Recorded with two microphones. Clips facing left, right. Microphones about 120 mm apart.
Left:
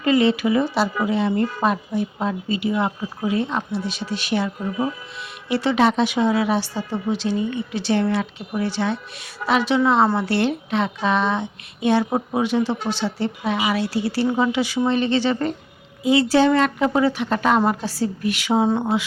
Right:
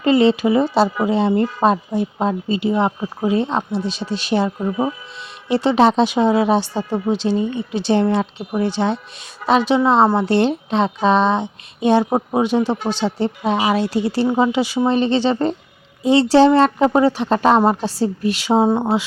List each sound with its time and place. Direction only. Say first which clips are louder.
0.0 s a woman's voice: right 4 dB; 30° right (ahead or behind)
13.7 s a woman's voice: right 4 dB; 20° right (ahead or behind)